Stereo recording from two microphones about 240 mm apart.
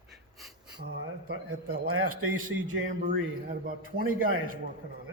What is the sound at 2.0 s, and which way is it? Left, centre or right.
Speech, right.